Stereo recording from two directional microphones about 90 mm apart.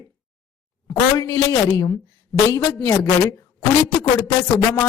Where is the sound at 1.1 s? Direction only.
40° left (ahead or behind).